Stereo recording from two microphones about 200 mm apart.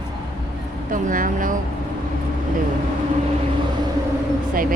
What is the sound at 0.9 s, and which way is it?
Speech, 40° right (ahead or behind).